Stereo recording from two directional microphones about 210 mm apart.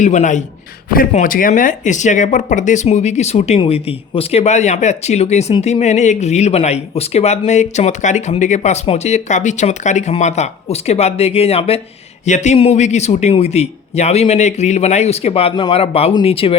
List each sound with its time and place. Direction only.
0.0 s speech: 35° left (ahead or behind)